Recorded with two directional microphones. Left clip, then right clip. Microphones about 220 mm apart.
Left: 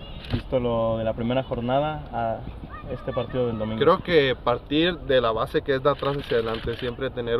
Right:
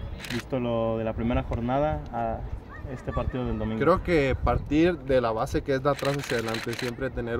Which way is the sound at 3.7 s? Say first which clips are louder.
Left 4 dB; 15° right (ahead or behind).